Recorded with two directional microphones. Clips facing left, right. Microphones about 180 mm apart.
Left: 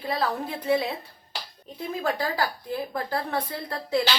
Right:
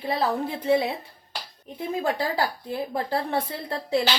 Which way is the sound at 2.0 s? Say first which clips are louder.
Right 1 dB; 25° right (ahead or behind).